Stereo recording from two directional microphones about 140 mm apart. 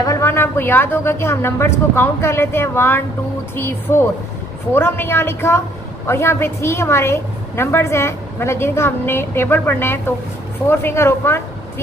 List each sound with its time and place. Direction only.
0.0 s a woman's voice: 20° left (ahead or behind)